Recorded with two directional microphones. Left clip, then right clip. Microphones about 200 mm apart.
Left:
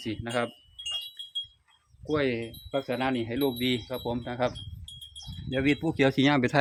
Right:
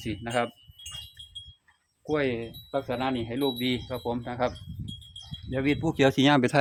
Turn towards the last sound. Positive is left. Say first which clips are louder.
# right 2 dB
turn(degrees=-5)  # may be behind; listen again after turning